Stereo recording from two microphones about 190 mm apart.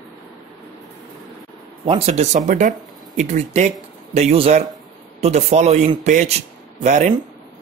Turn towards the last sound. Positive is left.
turn(degrees=-40)  # may be behind; listen again after turning